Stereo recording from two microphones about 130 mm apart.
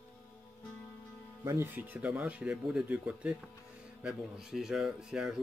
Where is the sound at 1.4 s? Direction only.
25° right (ahead or behind).